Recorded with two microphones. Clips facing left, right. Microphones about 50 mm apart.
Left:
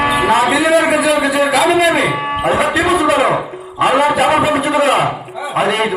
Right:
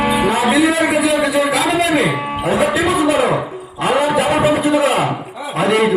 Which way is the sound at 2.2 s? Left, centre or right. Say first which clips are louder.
Left 2 dB; left.